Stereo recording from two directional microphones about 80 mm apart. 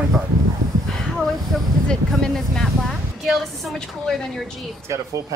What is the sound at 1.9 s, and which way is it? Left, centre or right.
A woman's voice, centre.